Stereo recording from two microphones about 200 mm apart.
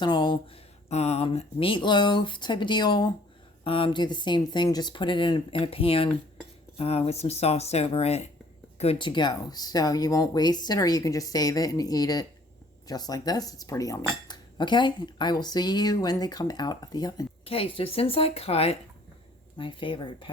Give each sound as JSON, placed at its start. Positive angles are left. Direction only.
{"t": 0.0, "sound": "speech", "side_deg": 20}